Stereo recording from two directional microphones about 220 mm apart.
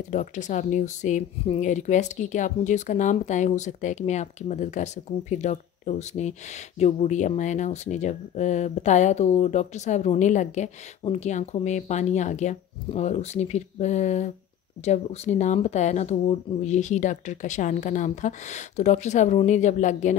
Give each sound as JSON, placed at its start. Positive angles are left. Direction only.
{"t": 0.1, "sound": "speech", "side_deg": 35}